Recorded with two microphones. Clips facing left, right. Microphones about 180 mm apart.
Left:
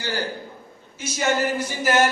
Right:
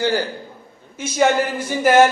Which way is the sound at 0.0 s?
50° right (ahead or behind).